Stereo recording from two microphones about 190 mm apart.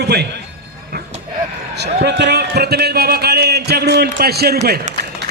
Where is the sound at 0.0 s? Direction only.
60° right (ahead or behind).